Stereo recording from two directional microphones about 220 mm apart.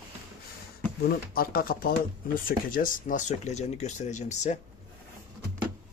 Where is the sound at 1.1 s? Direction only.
40° left (ahead or behind).